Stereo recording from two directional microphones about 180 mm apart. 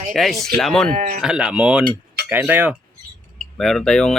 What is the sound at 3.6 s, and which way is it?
Speech, centre (ahead or behind).